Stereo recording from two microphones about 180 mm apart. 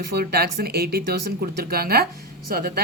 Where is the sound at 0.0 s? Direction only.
65° right (ahead or behind).